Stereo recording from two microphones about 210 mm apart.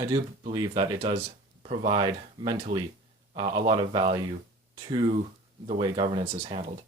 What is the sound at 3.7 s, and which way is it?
Speech, 25° right (ahead or behind).